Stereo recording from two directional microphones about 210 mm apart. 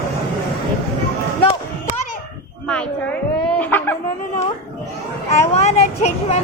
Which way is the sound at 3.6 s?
10° left (ahead or behind).